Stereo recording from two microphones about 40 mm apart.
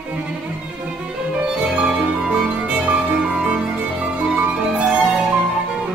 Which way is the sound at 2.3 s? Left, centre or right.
Right.